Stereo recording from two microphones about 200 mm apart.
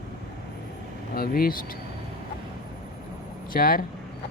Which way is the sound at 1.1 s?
50° left (ahead or behind).